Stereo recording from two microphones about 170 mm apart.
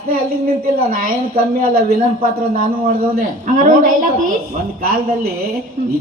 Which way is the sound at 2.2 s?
60° right (ahead or behind).